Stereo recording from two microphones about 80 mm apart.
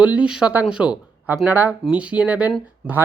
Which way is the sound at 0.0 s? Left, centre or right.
Centre.